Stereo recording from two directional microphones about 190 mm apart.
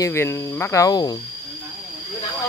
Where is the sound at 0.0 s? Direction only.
15° left (ahead or behind).